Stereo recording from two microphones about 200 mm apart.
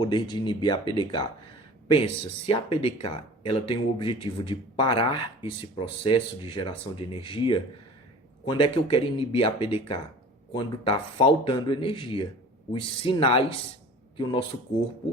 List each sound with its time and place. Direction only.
0.0 s speech: 20° left (ahead or behind)
2.5 s speech: 25° left (ahead or behind)